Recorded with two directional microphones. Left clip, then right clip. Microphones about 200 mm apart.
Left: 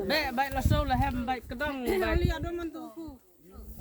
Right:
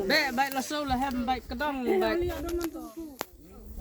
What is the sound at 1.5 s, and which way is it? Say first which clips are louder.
Speech: right 2 dB; 55° right (ahead or behind).